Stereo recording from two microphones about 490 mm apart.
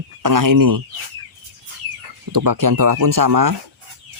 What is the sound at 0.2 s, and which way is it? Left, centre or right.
Speech, right.